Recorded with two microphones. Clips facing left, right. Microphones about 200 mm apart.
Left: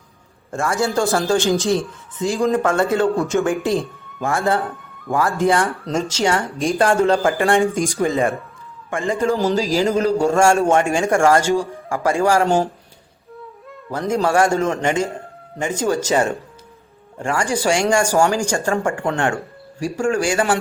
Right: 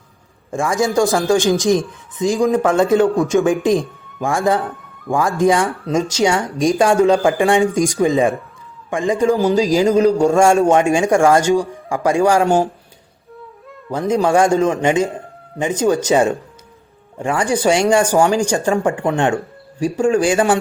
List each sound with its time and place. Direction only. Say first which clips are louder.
0.9 s speech: right 4 dB; 15° right (ahead or behind)
5.6 s speech: right 2 dB; centre (ahead or behind)
5.9 s speech: right 4 dB; 15° right (ahead or behind)
14.1 s speech: right 3 dB; 15° right (ahead or behind)